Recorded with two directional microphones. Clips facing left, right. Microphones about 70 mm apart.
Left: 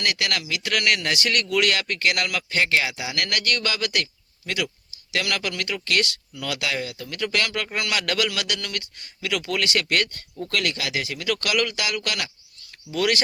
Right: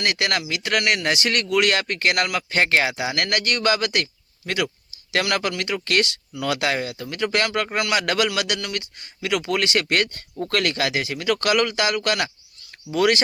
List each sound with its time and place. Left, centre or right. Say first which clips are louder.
0.0 s a man's voice: right 3 dB; right
10.3 s a man's voice: right 4 dB; right